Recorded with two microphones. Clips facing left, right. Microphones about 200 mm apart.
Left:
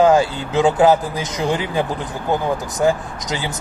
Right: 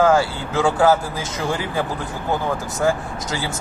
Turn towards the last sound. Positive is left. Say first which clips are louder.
# left 1 dB
turn(degrees=20)  # may be behind; listen again after turning